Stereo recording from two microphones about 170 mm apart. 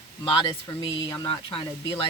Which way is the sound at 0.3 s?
30° left (ahead or behind).